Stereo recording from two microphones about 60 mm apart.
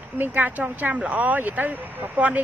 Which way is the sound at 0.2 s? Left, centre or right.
Right.